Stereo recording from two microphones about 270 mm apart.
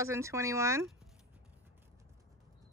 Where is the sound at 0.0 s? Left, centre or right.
Centre.